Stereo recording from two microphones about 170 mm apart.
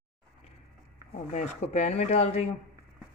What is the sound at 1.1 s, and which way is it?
Speech, 45° left (ahead or behind).